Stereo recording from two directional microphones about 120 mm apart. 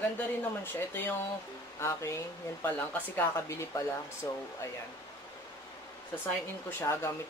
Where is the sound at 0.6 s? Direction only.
20° left (ahead or behind).